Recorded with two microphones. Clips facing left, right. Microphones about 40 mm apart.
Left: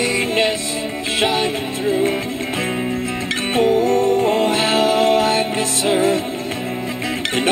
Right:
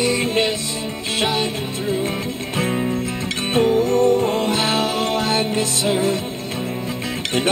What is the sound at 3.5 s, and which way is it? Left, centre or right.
Music, centre.